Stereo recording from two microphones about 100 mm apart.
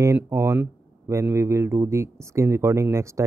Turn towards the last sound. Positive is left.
turn(degrees=-30)  # may be behind; listen again after turning